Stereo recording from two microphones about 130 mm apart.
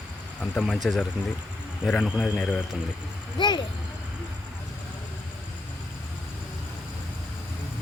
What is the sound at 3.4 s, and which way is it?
Vehicle, 35° left (ahead or behind).